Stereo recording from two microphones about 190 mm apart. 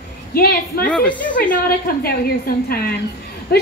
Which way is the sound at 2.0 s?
55° left (ahead or behind).